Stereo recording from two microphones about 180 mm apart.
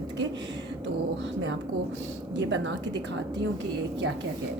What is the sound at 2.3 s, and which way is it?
Speech, 90° right.